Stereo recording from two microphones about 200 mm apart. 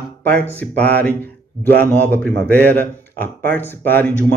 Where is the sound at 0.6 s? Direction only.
10° left (ahead or behind).